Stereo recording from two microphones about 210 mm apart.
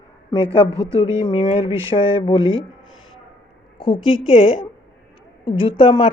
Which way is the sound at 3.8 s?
25° left (ahead or behind).